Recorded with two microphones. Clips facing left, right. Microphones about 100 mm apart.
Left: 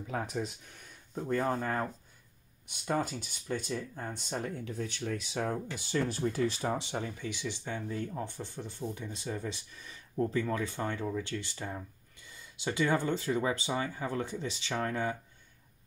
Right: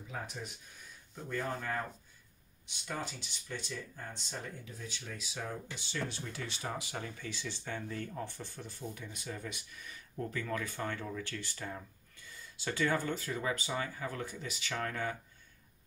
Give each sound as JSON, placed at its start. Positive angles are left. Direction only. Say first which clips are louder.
{"t": 0.1, "sound": "speech", "louder": "left 8 dB", "side_deg": 65}
{"t": 1.1, "sound": "speech", "louder": "left 7 dB", "side_deg": 40}